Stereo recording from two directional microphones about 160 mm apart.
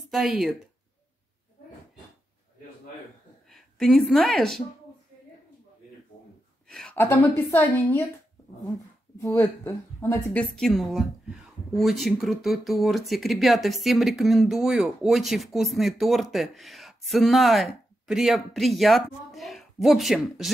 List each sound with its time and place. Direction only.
0.1 s speech: centre (ahead or behind)
3.4 s a woman's voice: centre (ahead or behind)
6.7 s a woman's voice: 5° left (ahead or behind)
9.4 s speech: 15° left (ahead or behind)
10.5 s speech: centre (ahead or behind)